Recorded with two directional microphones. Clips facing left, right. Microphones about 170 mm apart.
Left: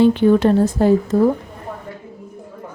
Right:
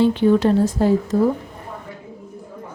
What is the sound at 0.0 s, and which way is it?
Speech, 55° left (ahead or behind).